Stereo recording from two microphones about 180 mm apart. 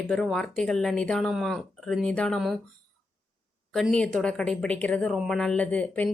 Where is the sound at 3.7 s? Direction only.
Centre (ahead or behind).